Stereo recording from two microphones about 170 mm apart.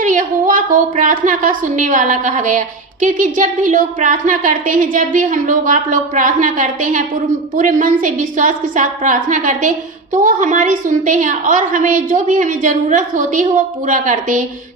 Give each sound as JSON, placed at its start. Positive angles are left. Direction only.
{"t": 0.0, "sound": "a woman's voice", "side_deg": -50}